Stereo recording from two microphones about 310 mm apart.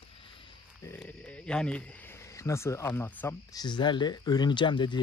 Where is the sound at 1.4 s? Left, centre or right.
Centre.